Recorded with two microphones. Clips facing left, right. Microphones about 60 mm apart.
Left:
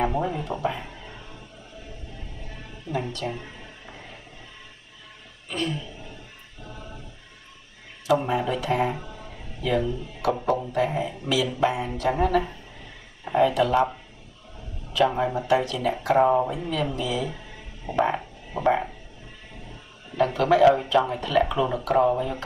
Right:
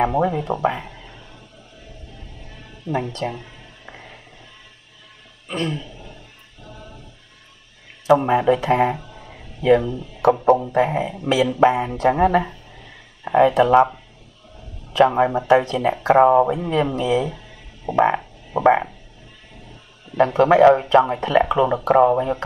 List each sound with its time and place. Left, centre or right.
0.0 s speech: right
2.9 s speech: right
5.5 s speech: right
8.1 s speech: right
14.9 s speech: right
20.2 s speech: right